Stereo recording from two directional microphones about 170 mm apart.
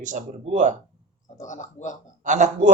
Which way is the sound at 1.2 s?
45° left (ahead or behind).